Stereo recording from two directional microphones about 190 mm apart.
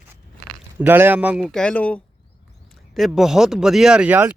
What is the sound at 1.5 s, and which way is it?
Speech, 5° left (ahead or behind).